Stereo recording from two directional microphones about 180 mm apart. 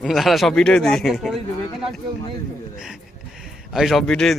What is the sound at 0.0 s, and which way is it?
Speech, centre (ahead or behind).